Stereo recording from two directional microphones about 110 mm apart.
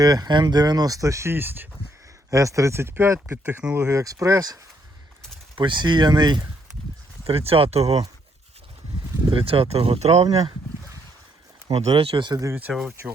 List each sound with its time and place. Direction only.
0.0 s speech: 35° right (ahead or behind); by 1.6 s 20° right (ahead or behind)
2.3 s speech: 30° right (ahead or behind); by 3.8 s 10° right (ahead or behind)
3.8 s speech: 30° right (ahead or behind)
5.5 s speech: 45° right (ahead or behind)
7.3 s speech: 60° right (ahead or behind)
9.3 s speech: 60° right (ahead or behind); by 10.2 s 75° right (ahead or behind)
11.7 s speech: 65° right (ahead or behind); by 12.4 s 45° right (ahead or behind)
12.7 s speech: centre (ahead or behind)